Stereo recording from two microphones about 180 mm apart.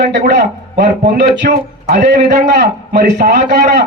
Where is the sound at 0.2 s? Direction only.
40° right (ahead or behind).